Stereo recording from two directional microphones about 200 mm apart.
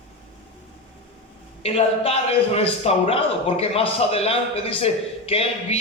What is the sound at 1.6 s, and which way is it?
A man's voice, 30° left (ahead or behind).